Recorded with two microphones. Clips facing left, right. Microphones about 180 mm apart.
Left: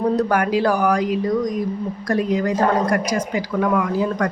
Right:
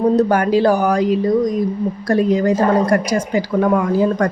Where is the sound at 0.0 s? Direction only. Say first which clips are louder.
Right 4 dB; 25° right (ahead or behind).